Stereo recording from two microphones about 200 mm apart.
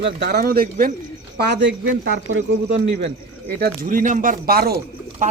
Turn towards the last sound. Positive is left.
turn(degrees=-40)  # may be behind; listen again after turning